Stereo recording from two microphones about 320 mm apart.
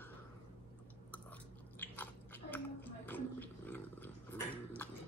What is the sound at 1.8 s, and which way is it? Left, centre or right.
Biting, centre.